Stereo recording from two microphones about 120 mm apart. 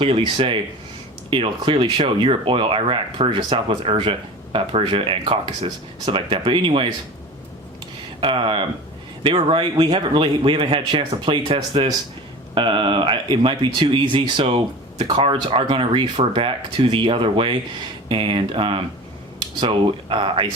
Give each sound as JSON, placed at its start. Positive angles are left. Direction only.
{"t": 0.0, "sound": "speech", "side_deg": -45}
{"t": 8.2, "sound": "speech", "side_deg": -45}